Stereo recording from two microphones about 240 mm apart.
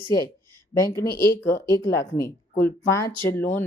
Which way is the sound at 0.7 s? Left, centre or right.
Centre.